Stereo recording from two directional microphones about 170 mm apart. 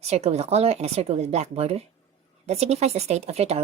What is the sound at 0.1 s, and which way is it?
A woman's voice, 40° right (ahead or behind).